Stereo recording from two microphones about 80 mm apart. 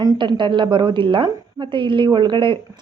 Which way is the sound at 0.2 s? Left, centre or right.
Right.